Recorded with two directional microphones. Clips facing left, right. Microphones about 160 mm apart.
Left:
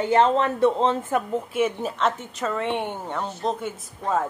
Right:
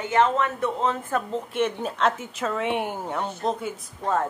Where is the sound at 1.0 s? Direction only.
15° left (ahead or behind).